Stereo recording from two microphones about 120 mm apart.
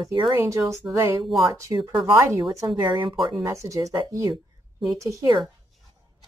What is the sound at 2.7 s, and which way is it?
Speech, 40° right (ahead or behind).